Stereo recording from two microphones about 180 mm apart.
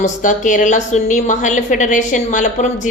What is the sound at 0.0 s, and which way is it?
A woman's voice, 45° left (ahead or behind).